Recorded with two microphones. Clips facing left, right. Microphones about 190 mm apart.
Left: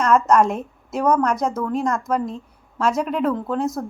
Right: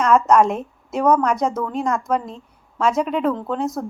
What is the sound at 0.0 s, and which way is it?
A woman's voice, centre (ahead or behind).